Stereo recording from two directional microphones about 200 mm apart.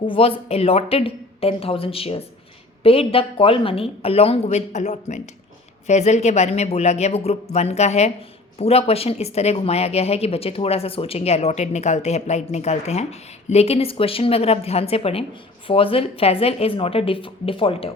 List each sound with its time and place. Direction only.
0.1 s a woman's voice: 30° left (ahead or behind)